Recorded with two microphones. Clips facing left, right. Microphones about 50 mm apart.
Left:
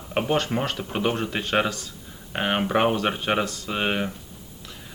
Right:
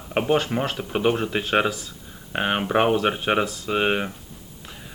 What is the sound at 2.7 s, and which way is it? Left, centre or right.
Speech, centre.